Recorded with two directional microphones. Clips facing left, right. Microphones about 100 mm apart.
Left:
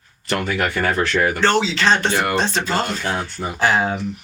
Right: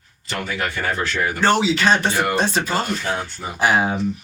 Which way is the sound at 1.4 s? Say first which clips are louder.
Right 3 dB; 15° right (ahead or behind).